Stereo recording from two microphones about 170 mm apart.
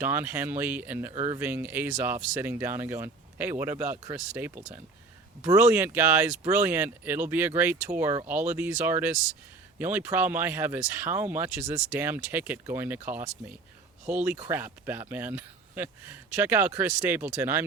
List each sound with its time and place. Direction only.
0.0 s speech: 10° right (ahead or behind)